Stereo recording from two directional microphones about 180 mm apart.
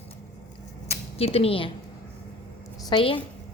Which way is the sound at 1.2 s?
30° left (ahead or behind).